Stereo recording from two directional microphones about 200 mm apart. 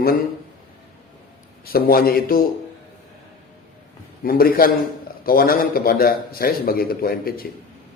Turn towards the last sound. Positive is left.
turn(degrees=45)  # may be behind; listen again after turning